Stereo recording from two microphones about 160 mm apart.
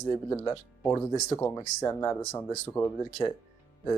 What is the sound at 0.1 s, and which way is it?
Speech, 15° left (ahead or behind).